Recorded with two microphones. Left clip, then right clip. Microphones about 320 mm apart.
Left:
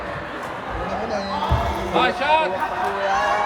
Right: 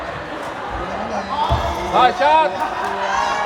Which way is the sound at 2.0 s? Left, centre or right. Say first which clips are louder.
Right 5 dB; centre.